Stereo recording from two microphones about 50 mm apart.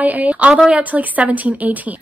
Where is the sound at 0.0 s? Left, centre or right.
Right.